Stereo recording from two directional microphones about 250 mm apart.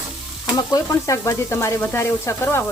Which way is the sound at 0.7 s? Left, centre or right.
Centre.